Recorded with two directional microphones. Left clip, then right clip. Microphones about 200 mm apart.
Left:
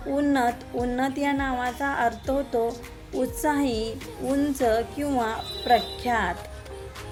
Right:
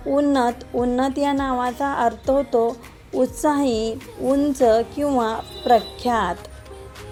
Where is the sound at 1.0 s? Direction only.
15° right (ahead or behind).